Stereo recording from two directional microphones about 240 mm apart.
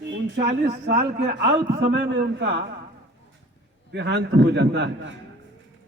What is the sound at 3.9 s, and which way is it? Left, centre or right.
A man's voice, right.